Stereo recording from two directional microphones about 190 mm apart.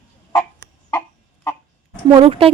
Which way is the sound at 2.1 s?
30° right (ahead or behind).